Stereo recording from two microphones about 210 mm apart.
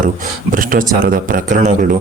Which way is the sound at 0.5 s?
40° right (ahead or behind).